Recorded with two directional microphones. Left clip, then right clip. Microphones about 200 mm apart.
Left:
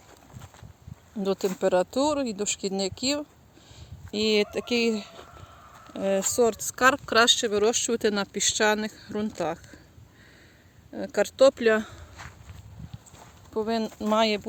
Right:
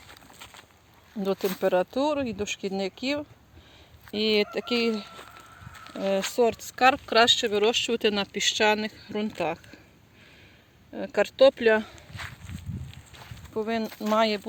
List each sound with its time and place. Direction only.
0.3 s a sound: 15° right (ahead or behind)
1.1 s speech: centre (ahead or behind)
10.9 s speech: centre (ahead or behind)
13.5 s speech: centre (ahead or behind)